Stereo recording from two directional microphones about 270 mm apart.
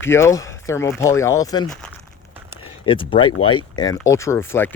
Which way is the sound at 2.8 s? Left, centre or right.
Centre.